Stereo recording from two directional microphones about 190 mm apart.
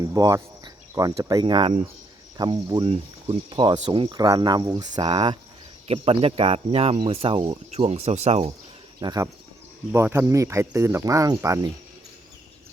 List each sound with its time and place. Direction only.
0.0 s speech: 20° right (ahead or behind)
9.0 s speech: 20° right (ahead or behind)